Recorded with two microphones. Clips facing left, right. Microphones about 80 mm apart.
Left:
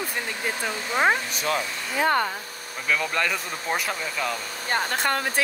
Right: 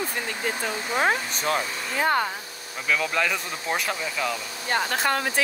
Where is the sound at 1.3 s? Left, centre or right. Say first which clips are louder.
Right 1 dB; right.